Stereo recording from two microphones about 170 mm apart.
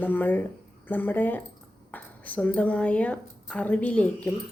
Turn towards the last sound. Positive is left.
turn(degrees=5)  # may be behind; listen again after turning